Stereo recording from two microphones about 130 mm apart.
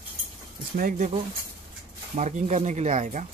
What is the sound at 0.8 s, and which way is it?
Speech, 70° right (ahead or behind).